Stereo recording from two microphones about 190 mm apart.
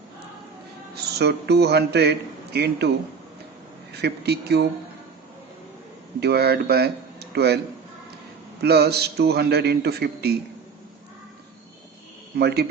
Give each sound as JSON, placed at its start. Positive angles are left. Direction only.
{"t": 0.9, "sound": "speech", "side_deg": -60}
{"t": 4.0, "sound": "speech", "side_deg": -60}
{"t": 6.1, "sound": "speech", "side_deg": -60}
{"t": 8.6, "sound": "speech", "side_deg": -60}
{"t": 12.4, "sound": "speech", "side_deg": -60}